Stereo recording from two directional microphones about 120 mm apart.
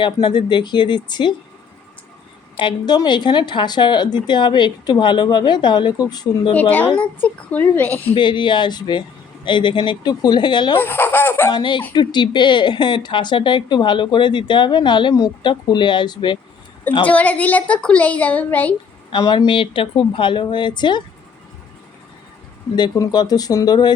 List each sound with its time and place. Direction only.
0.0 s speech: 40° left (ahead or behind)
2.6 s speech: 40° left (ahead or behind)
6.5 s a woman's voice: 15° left (ahead or behind)
8.1 s speech: 40° left (ahead or behind)
10.8 s speech: 15° left (ahead or behind)
11.5 s speech: 40° left (ahead or behind)
17.1 s a woman's voice: 10° left (ahead or behind)
19.1 s speech: 35° left (ahead or behind)
19.5 s speech: 45° left (ahead or behind)
22.7 s speech: 35° left (ahead or behind)